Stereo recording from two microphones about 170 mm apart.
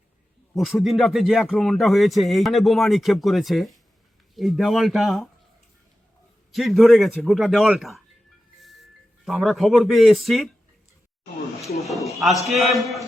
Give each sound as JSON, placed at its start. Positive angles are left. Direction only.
{"t": 0.5, "sound": "speech", "side_deg": 0}
{"t": 6.5, "sound": "speech", "side_deg": 0}
{"t": 9.2, "sound": "speech", "side_deg": 0}
{"t": 11.8, "sound": "a man's voice", "side_deg": 0}